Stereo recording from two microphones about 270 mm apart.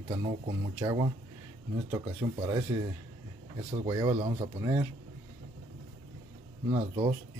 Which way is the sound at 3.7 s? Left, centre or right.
Centre.